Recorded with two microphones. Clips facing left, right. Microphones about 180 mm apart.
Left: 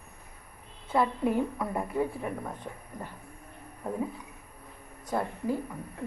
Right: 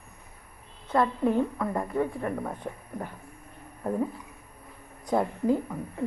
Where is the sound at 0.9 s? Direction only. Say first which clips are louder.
Right 2 dB; 5° left (ahead or behind).